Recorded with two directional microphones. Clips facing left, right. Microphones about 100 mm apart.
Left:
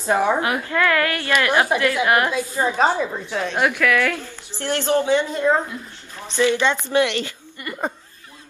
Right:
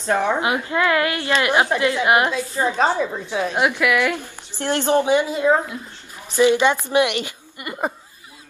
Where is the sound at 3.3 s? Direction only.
10° right (ahead or behind).